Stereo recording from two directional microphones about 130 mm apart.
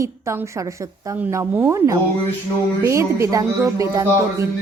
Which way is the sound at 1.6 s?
20° right (ahead or behind).